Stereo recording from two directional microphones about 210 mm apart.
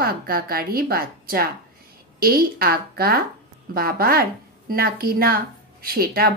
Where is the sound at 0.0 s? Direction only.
45° right (ahead or behind).